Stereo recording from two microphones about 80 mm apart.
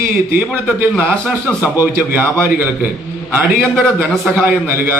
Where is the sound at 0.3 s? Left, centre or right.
Right.